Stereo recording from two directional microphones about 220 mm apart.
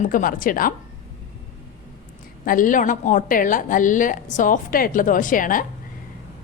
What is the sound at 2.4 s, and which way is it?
A woman's voice, 40° left (ahead or behind).